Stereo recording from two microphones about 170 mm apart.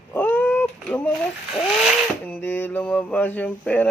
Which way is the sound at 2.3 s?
10° left (ahead or behind).